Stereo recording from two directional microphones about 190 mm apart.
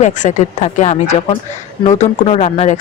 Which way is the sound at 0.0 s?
40° left (ahead or behind).